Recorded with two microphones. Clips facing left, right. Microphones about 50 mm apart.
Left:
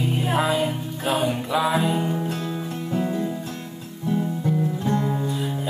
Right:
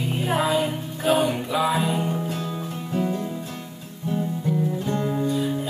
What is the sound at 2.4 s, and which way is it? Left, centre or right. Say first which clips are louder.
Music: left 1 dB; centre.